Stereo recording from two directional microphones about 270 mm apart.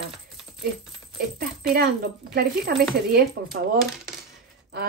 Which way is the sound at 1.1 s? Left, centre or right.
Right.